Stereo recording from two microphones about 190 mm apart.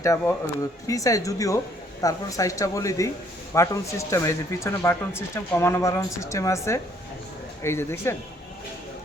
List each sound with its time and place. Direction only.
0.0 s speech: 15° left (ahead or behind)